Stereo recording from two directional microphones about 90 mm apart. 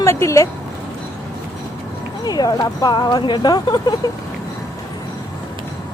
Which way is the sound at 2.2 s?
45° left (ahead or behind).